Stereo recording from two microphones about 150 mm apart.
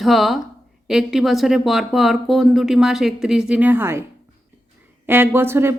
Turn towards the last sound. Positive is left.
turn(degrees=-15)  # may be behind; listen again after turning